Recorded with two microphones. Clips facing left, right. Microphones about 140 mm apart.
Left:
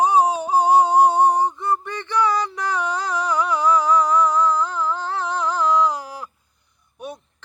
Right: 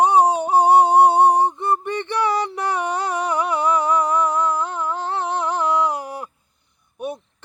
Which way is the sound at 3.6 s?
60° right (ahead or behind).